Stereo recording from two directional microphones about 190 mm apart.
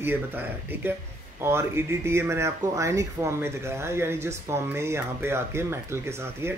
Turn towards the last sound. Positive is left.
turn(degrees=-15)  # may be behind; listen again after turning